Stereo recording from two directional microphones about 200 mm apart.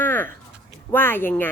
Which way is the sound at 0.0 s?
10° left (ahead or behind).